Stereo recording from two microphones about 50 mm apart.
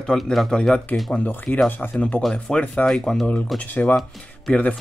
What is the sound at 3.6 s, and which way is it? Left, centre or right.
Speech, left.